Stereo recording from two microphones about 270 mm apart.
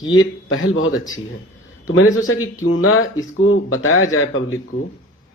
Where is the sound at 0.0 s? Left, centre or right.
Left.